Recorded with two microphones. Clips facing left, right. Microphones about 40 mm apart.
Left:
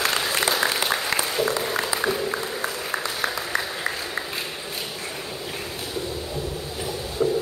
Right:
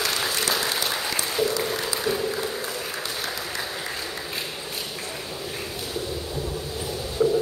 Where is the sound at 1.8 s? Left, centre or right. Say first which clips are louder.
Left 2 dB; left.